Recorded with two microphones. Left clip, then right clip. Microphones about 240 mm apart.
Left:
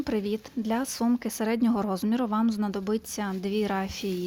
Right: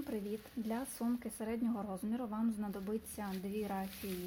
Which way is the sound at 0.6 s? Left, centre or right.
Centre.